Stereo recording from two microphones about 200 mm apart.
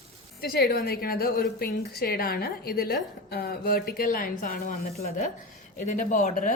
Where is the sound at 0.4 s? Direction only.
55° left (ahead or behind).